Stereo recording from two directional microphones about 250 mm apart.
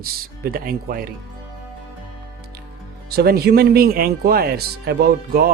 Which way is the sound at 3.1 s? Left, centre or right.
Right.